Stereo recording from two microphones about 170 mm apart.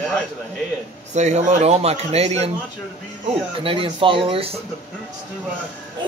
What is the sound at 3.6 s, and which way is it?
Speech, 30° right (ahead or behind).